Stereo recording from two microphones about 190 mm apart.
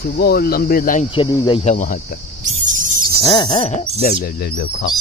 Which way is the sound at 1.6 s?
40° left (ahead or behind).